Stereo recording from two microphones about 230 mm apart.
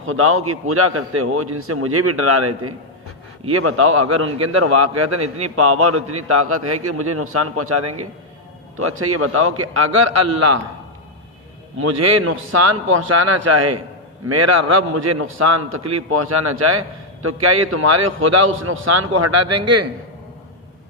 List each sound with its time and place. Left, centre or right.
0.0 s a man's voice: right
11.8 s a man's voice: right